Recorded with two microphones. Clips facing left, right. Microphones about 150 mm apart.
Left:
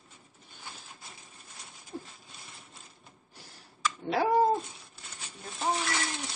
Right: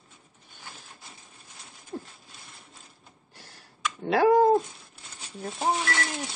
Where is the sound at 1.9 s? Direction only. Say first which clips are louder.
Right 4 dB; 60° right (ahead or behind).